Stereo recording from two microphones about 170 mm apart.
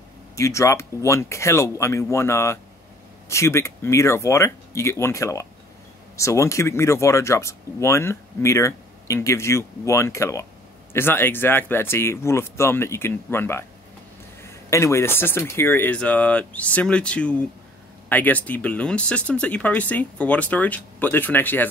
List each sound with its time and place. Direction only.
0.4 s speech: 20° left (ahead or behind)